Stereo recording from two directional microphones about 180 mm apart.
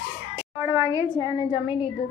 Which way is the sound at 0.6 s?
15° right (ahead or behind).